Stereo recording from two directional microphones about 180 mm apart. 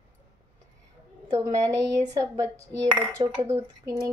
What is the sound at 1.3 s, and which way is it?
A woman's voice, 20° right (ahead or behind).